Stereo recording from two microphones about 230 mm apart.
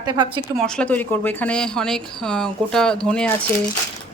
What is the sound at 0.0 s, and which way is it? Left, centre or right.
Speech, centre.